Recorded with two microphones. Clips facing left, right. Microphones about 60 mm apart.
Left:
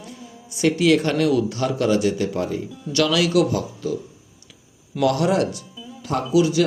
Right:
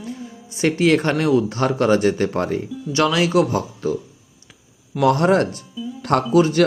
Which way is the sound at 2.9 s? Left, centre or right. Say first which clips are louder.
Right 1 dB; right.